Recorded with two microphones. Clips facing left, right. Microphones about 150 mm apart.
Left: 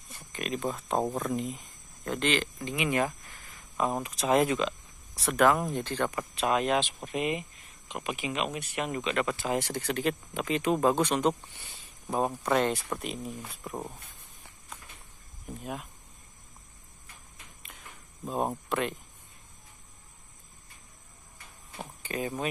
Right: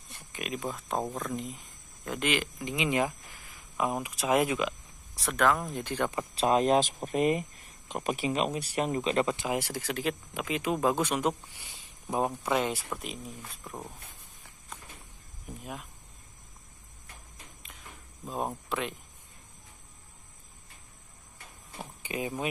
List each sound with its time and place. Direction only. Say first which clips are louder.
0.1 s speech: left 3 dB; 5° right (ahead or behind)
3.7 s speech: left 1 dB; 5° right (ahead or behind)
5.1 s speech: left 3 dB; 5° left (ahead or behind)
5.7 s speech: left 1 dB; 10° right (ahead or behind)
6.1 s speech: right 5 dB; 30° right (ahead or behind); by 12.3 s 15° right (ahead or behind)
12.4 s speech: left 2 dB; 5° right (ahead or behind)
18.7 s speech: left 3 dB; centre (ahead or behind)
22.0 s speech: left 1 dB; 10° right (ahead or behind)